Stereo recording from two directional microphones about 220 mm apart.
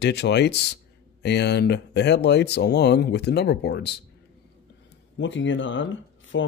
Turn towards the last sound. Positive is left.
turn(degrees=60)  # may be behind; listen again after turning